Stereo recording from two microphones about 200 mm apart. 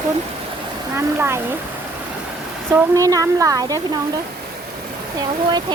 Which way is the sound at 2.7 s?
10° right (ahead or behind).